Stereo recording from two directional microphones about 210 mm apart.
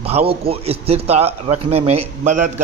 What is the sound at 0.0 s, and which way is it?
A man's voice, 30° right (ahead or behind).